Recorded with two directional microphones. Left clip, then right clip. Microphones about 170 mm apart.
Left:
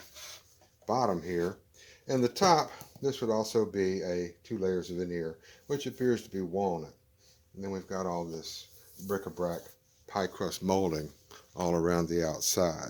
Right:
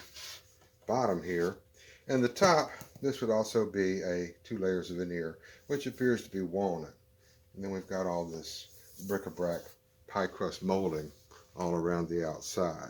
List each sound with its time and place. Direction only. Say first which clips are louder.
0.9 s speech: left 1 dB; 45° left (ahead or behind)
10.1 s speech: even; 60° left (ahead or behind); by 12.9 s 90° left